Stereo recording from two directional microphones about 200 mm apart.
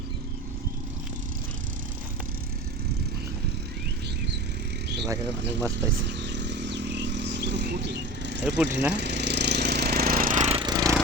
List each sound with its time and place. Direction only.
5.0 s speech: 15° right (ahead or behind)
6.1 s vehicle: 60° right (ahead or behind)
8.4 s speech: 5° right (ahead or behind)
8.9 s jackhammer: 60° right (ahead or behind); by 10.9 s 20° right (ahead or behind)